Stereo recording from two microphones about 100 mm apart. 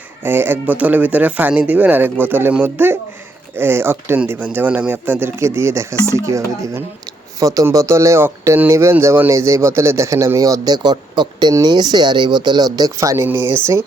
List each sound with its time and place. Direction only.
0.2 s speech: 20° right (ahead or behind)